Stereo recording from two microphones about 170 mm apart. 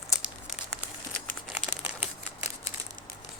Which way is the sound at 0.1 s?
Centre (ahead or behind).